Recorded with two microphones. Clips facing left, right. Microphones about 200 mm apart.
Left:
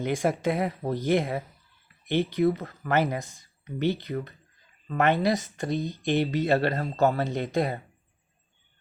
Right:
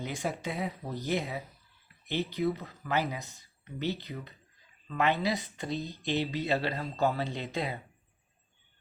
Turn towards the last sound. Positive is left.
turn(degrees=50)  # may be behind; listen again after turning